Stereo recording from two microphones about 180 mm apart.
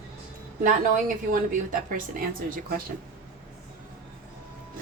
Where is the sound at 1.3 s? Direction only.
50° right (ahead or behind).